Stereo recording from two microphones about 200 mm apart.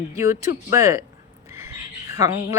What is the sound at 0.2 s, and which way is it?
Speech, 15° right (ahead or behind).